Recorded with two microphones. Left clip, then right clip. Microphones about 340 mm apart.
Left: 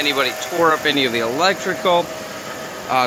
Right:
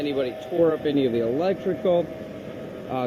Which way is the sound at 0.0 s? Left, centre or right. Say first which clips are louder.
Left 8 dB; left.